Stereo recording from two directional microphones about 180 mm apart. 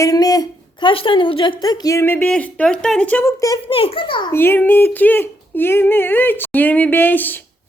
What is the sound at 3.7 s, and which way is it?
Speech, 30° left (ahead or behind).